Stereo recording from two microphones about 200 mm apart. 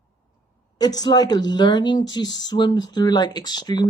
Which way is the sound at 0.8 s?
20° left (ahead or behind).